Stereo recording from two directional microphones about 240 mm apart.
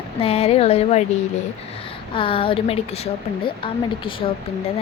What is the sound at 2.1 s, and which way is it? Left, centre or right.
A woman's voice, left.